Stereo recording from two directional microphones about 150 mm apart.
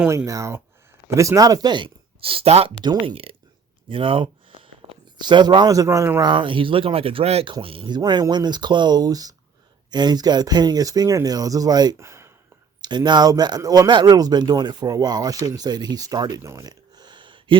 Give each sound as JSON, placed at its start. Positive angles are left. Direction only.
{"t": 0.3, "sound": "speech", "side_deg": -20}
{"t": 2.8, "sound": "speech", "side_deg": -30}
{"t": 6.3, "sound": "speech", "side_deg": -35}
{"t": 12.8, "sound": "speech", "side_deg": -30}